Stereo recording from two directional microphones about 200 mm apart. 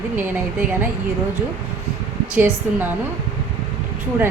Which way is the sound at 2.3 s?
10° right (ahead or behind).